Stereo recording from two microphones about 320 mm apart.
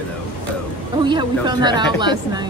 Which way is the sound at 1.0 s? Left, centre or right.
Centre.